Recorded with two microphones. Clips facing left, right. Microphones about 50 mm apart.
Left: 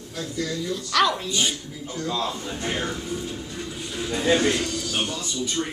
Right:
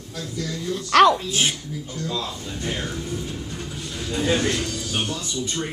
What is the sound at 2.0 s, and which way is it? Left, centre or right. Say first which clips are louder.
Speech: left 3 dB; centre.